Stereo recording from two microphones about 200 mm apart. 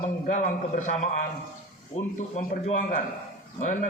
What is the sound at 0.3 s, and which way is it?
Speech, 40° left (ahead or behind).